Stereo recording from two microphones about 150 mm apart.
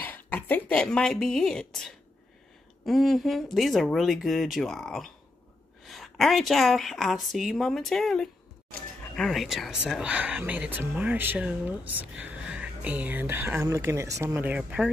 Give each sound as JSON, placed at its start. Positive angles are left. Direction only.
{"t": 0.0, "sound": "a woman's voice", "side_deg": 10}
{"t": 14.3, "sound": "speech", "side_deg": -10}